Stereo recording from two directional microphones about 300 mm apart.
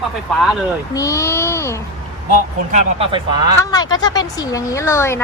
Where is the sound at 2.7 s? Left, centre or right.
Centre.